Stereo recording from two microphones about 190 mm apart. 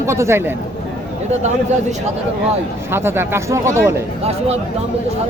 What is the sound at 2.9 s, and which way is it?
Speech, 10° right (ahead or behind).